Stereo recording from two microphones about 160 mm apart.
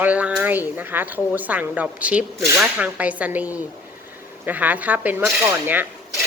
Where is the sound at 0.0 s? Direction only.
10° right (ahead or behind).